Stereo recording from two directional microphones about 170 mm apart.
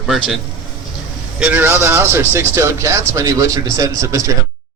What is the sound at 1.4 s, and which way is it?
Speech, 10° right (ahead or behind).